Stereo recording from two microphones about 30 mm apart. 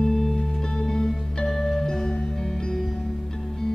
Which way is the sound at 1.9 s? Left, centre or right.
Left.